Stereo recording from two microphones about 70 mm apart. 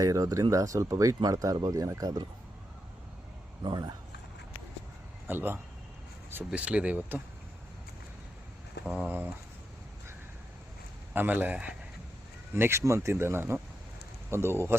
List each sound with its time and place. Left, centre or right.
0.0 s speech: right
3.6 s speech: right
5.3 s speech: right
6.5 s speech: centre
9.0 s speech: right
11.1 s speech: right
12.5 s speech: right